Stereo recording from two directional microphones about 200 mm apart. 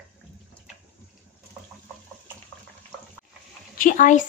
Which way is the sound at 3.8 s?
40° left (ahead or behind).